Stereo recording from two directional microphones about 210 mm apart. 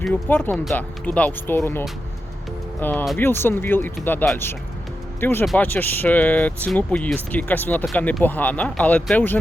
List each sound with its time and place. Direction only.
0.0 s speech: 10° left (ahead or behind)
2.8 s speech: 10° left (ahead or behind)